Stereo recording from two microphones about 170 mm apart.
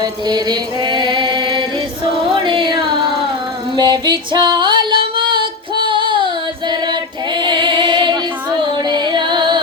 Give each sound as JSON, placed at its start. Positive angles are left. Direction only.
{"t": 0.0, "sound": "chant", "side_deg": -25}
{"t": 2.1, "sound": "music", "side_deg": -30}